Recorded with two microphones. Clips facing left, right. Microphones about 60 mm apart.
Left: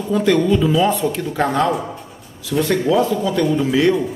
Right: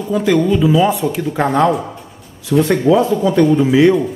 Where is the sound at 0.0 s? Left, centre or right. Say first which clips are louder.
Right 2 dB; centre.